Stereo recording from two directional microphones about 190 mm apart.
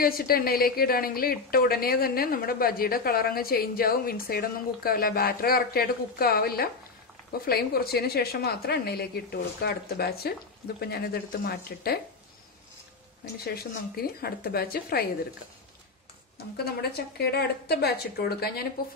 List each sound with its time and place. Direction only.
0.0 s a woman's voice: 50° left (ahead or behind)
13.2 s a woman's voice: 55° left (ahead or behind)
16.5 s a woman's voice: 55° left (ahead or behind)